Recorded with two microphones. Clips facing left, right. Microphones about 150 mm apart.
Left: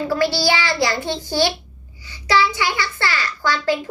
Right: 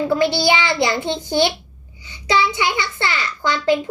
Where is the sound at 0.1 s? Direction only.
20° right (ahead or behind).